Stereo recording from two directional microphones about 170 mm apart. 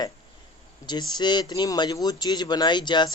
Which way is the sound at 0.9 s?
25° left (ahead or behind).